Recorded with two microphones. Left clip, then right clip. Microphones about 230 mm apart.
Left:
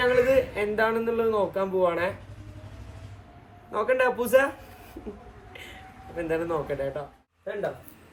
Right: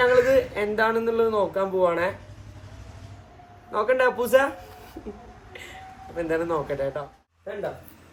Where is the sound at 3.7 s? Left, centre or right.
Centre.